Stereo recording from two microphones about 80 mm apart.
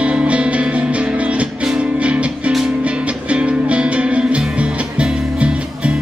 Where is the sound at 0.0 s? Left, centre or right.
Centre.